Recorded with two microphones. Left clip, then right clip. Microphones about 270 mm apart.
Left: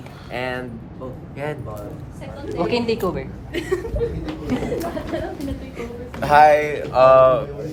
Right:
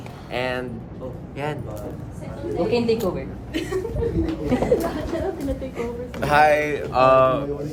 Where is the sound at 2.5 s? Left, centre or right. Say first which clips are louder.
Even; left.